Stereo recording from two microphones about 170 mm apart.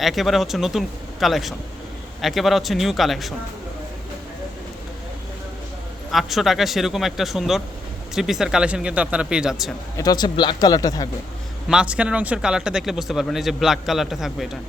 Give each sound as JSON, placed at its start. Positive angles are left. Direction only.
{"t": 0.0, "sound": "speech", "side_deg": 0}
{"t": 6.1, "sound": "speech", "side_deg": 0}
{"t": 10.0, "sound": "speech", "side_deg": 25}
{"t": 11.7, "sound": "speech", "side_deg": -5}